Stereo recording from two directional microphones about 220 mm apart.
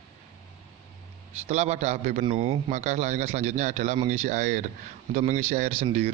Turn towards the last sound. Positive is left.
turn(degrees=-30)  # may be behind; listen again after turning